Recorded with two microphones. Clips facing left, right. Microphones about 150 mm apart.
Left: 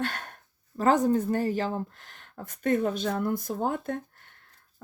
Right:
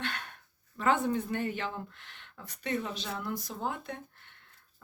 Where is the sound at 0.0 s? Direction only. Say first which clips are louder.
Left 6 dB; 45° left (ahead or behind).